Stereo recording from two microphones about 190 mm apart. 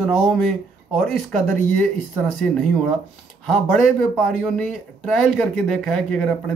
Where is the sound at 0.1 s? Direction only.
Centre (ahead or behind).